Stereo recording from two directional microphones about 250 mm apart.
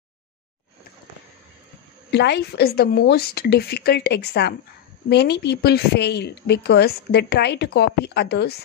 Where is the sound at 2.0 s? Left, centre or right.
Left.